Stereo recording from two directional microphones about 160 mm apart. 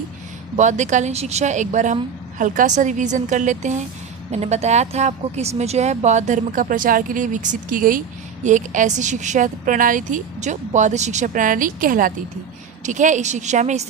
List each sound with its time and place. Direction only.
0.5 s speech: 50° right (ahead or behind)